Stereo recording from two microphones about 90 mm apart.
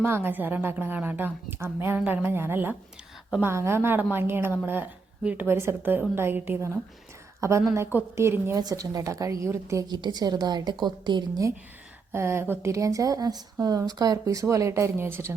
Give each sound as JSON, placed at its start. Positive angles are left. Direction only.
{"t": 0.0, "sound": "a woman's voice", "side_deg": -25}
{"t": 8.5, "sound": "speech", "side_deg": -40}
{"t": 9.8, "sound": "a woman's voice", "side_deg": -55}
{"t": 12.1, "sound": "speech", "side_deg": -30}